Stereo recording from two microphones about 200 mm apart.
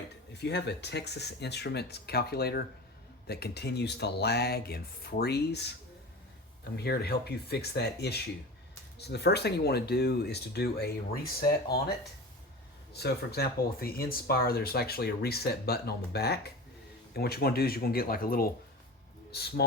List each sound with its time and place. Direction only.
0.3 s speech: 55° left (ahead or behind)
6.7 s speech: 55° left (ahead or behind)
13.0 s speech: 55° left (ahead or behind)